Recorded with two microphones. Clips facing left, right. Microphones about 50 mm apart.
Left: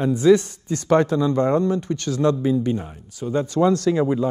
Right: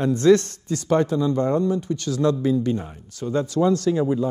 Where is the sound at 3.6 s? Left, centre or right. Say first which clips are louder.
Left 2 dB; left.